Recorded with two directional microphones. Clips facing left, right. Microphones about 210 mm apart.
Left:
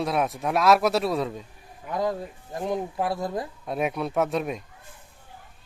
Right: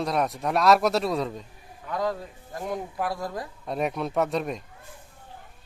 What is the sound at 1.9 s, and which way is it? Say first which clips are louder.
Speech: left 1 dB; 20° left (ahead or behind).